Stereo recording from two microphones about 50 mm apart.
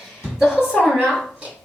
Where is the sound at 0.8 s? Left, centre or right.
Centre.